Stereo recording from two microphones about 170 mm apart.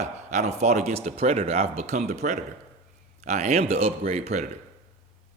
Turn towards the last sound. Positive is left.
turn(degrees=-40)  # may be behind; listen again after turning